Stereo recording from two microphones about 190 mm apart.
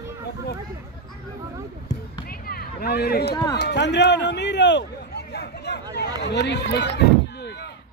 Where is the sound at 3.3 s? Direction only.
20° left (ahead or behind).